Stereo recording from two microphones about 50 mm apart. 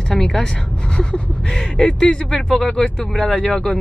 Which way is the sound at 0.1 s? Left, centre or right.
Centre.